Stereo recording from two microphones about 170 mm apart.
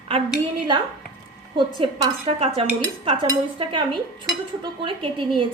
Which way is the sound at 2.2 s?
35° right (ahead or behind).